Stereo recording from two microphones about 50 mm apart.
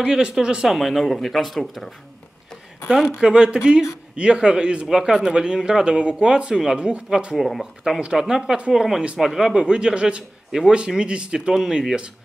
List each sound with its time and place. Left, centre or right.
0.0 s speech: centre
0.7 s speech: centre
3.2 s speech: centre
7.3 s speech: centre
8.0 s speech: centre